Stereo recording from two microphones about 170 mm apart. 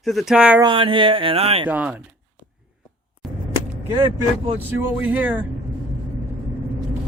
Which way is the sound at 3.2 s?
Centre (ahead or behind).